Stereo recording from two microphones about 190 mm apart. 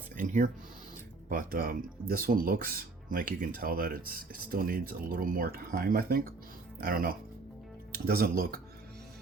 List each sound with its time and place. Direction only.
0.2 s speech: 45° right (ahead or behind)